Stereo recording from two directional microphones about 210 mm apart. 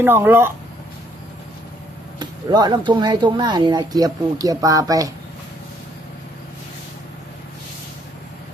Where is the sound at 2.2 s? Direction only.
20° right (ahead or behind).